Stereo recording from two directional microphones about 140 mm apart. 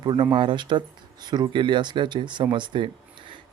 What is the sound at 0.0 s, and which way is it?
Speech, 30° right (ahead or behind).